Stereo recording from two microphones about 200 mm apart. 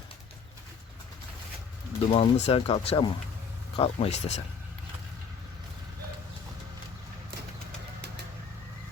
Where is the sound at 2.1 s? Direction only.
30° left (ahead or behind).